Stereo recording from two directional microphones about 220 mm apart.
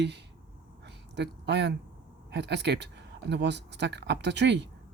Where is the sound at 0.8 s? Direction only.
50° right (ahead or behind).